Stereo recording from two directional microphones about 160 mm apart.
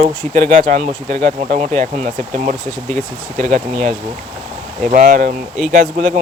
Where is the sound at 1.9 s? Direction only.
50° right (ahead or behind).